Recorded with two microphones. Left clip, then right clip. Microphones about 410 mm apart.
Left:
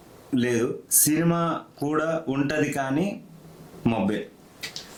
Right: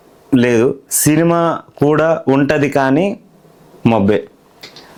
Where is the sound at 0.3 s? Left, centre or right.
Right.